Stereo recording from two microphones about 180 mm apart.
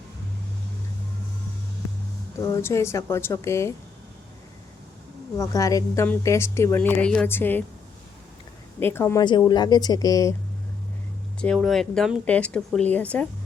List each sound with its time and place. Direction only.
2.4 s speech: 15° left (ahead or behind)
5.4 s speech: 20° left (ahead or behind)
8.8 s speech: 15° left (ahead or behind)
9.2 s speech: 25° left (ahead or behind)
11.3 s speech: 5° left (ahead or behind)